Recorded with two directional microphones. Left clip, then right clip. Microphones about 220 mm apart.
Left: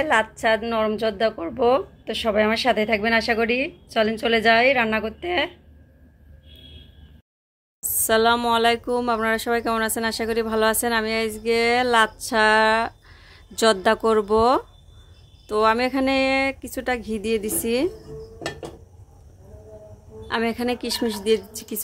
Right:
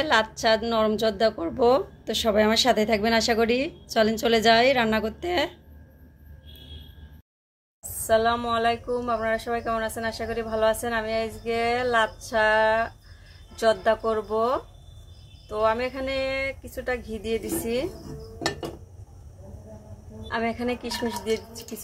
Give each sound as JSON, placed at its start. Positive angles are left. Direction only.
{"t": 0.1, "sound": "a woman's voice", "side_deg": 0}
{"t": 8.1, "sound": "speech", "side_deg": 50}
{"t": 20.2, "sound": "speech", "side_deg": 55}